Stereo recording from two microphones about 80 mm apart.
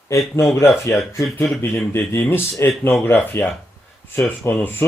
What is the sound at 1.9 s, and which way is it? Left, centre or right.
Speech, left.